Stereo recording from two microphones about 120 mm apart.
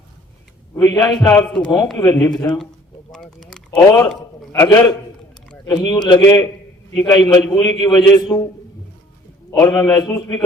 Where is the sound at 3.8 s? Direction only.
30° left (ahead or behind).